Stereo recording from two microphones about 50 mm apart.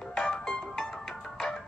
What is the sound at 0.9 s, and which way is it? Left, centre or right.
Music, centre.